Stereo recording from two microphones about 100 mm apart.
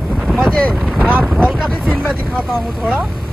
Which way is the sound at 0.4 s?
5° left (ahead or behind).